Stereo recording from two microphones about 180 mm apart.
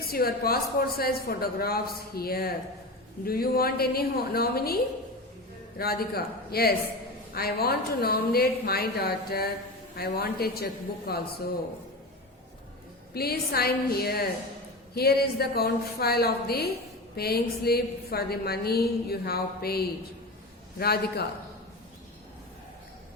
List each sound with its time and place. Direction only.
0.1 s a woman's voice: 55° left (ahead or behind)
13.1 s a woman's voice: 60° left (ahead or behind)